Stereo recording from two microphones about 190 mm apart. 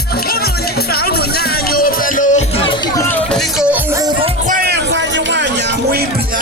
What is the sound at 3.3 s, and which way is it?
Music, 5° right (ahead or behind).